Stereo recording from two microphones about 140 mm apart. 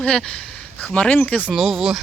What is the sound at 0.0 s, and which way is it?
Speech, 10° left (ahead or behind).